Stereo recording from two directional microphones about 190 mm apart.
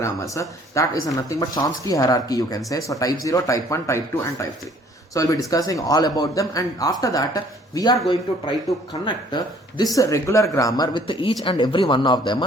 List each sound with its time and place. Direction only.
0.0 s a man's voice: 15° left (ahead or behind)